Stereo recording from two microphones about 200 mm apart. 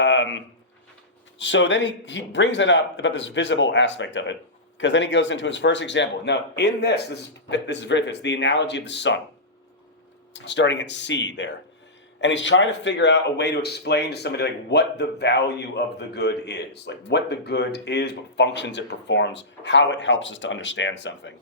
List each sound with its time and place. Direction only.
0.0 s a sound: 65° left (ahead or behind)
1.4 s speech: 65° left (ahead or behind)
10.3 s speech: 60° left (ahead or behind)